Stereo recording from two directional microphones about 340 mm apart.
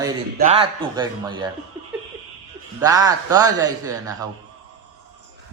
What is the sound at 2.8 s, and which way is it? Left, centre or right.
A man's voice, centre.